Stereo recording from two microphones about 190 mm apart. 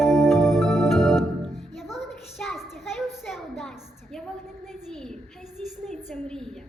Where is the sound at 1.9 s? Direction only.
Centre (ahead or behind).